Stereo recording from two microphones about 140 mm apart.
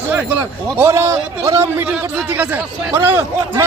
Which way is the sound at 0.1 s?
15° right (ahead or behind).